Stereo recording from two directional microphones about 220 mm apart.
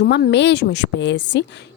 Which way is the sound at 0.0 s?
50° left (ahead or behind).